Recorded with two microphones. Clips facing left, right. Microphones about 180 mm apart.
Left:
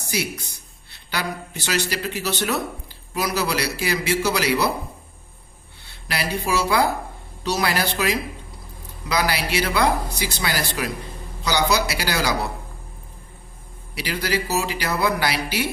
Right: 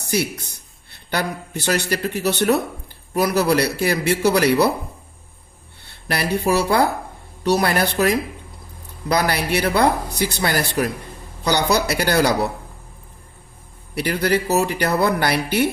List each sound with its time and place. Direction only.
0.0 s speech: 60° right (ahead or behind)
6.1 s speech: 55° right (ahead or behind)
13.9 s speech: 55° right (ahead or behind)